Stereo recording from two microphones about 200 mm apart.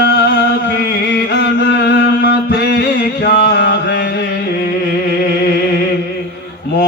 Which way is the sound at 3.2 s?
50° left (ahead or behind).